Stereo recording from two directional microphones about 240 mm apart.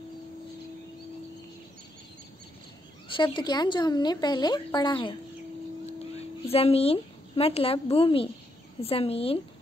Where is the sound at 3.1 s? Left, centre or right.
Left.